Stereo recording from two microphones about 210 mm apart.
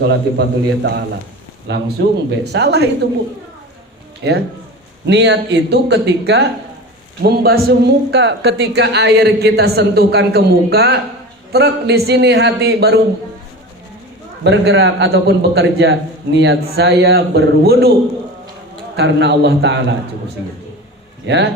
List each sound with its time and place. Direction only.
0.1 s speech: 55° right (ahead or behind)
4.2 s a man's voice: 55° right (ahead or behind)
14.4 s a man's voice: 60° right (ahead or behind)
18.9 s a man's voice: 55° right (ahead or behind)
21.2 s a man's voice: 55° right (ahead or behind)